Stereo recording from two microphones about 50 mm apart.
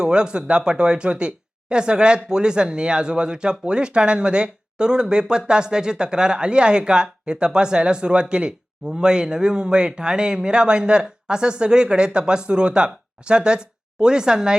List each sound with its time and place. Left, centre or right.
0.0 s speech: centre